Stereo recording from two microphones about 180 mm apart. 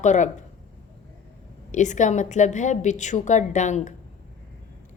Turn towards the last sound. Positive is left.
turn(degrees=40)  # may be behind; listen again after turning